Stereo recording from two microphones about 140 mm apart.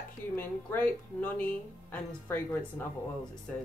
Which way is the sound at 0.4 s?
15° left (ahead or behind).